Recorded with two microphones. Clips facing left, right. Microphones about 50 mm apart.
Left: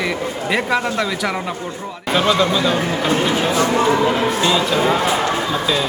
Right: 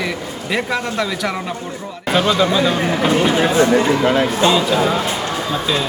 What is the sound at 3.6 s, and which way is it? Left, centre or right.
Speech, left.